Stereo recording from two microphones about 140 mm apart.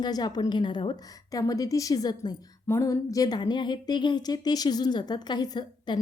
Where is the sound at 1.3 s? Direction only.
25° left (ahead or behind).